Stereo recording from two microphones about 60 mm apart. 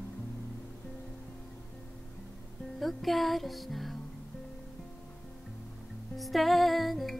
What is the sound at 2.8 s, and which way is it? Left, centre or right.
Music, centre.